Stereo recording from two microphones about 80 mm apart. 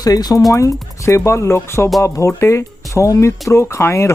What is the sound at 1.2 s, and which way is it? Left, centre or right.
Speech, left.